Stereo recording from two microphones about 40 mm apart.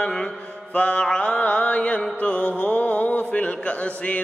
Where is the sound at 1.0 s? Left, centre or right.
Left.